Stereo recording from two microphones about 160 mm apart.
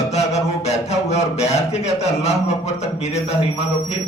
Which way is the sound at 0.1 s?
45° left (ahead or behind).